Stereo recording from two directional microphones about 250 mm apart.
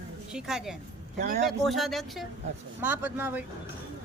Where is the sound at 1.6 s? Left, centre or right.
Centre.